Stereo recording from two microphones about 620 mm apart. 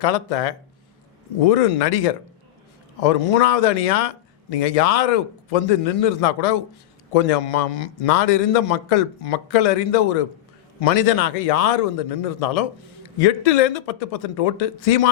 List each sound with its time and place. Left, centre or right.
0.0 s a man's voice: left